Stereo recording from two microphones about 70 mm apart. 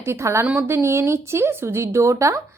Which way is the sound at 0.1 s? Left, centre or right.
Right.